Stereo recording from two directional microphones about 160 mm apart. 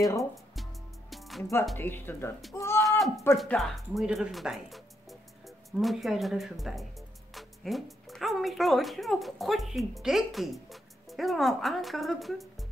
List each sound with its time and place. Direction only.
1.1 s music: centre (ahead or behind)
1.4 s speech: 15° left (ahead or behind)
2.5 s a sound: 20° left (ahead or behind)
3.3 s speech: centre (ahead or behind)